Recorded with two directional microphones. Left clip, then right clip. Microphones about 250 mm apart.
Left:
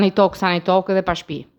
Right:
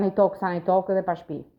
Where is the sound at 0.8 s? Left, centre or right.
Left.